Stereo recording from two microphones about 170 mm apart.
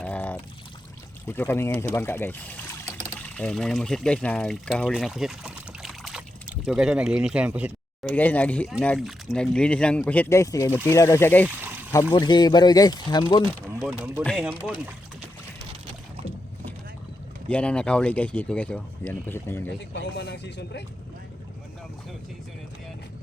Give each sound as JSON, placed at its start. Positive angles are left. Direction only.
{"t": 0.0, "sound": "pour", "side_deg": 10}
{"t": 1.3, "sound": "speech", "side_deg": 15}
{"t": 5.8, "sound": "pour", "side_deg": 0}
{"t": 8.0, "sound": "speech", "side_deg": 10}
{"t": 11.4, "sound": "a sound", "side_deg": -10}
{"t": 12.1, "sound": "speech", "side_deg": 25}
{"t": 13.4, "sound": "speech", "side_deg": 15}
{"t": 13.8, "sound": "speech", "side_deg": -5}
{"t": 16.2, "sound": "boat", "side_deg": -35}
{"t": 17.5, "sound": "speech", "side_deg": 5}
{"t": 19.8, "sound": "speech", "side_deg": 90}